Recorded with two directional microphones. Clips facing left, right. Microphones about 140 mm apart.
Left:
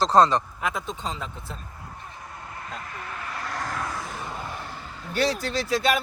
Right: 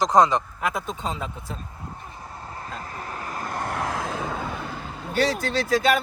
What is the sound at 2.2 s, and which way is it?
Vehicle, 30° right (ahead or behind).